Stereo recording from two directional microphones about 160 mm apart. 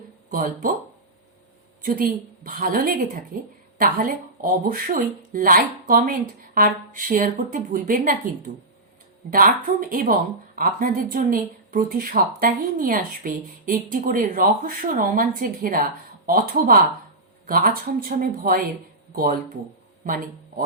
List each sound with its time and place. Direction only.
0.3 s speech: 60° right (ahead or behind)
1.8 s speech: 60° right (ahead or behind)
9.3 s a man's voice: 60° right (ahead or behind)